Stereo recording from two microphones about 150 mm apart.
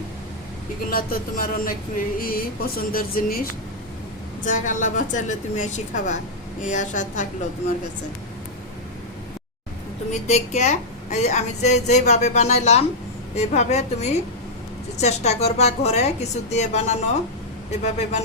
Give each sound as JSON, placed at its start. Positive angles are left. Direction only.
{"t": 0.9, "sound": "a sound", "side_deg": 75}
{"t": 4.4, "sound": "a woman's voice", "side_deg": 60}
{"t": 10.1, "sound": "a woman's voice", "side_deg": 50}